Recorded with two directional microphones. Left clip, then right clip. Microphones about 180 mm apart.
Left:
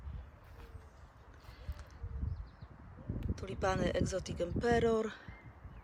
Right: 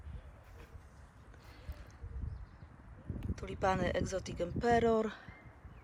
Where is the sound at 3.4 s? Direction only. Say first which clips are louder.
Right 2 dB; 15° left (ahead or behind).